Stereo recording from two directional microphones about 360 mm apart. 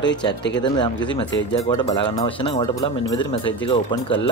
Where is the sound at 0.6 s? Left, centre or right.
Centre.